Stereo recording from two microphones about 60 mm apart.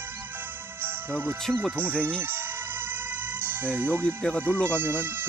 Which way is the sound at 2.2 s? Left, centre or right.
Right.